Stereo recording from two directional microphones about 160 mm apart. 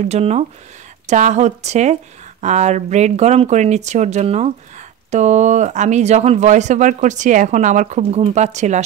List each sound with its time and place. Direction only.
0.0 s speech: 45° right (ahead or behind)